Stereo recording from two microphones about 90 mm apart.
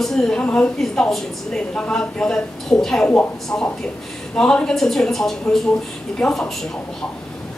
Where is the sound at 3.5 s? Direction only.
20° left (ahead or behind).